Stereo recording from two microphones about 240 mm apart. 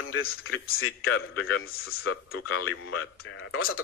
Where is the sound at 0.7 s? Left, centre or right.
Left.